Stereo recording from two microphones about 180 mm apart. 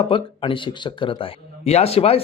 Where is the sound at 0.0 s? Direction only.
30° left (ahead or behind).